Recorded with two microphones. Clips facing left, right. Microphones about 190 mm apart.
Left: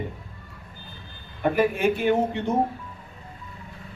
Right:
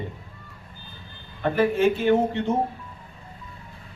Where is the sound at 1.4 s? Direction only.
15° left (ahead or behind).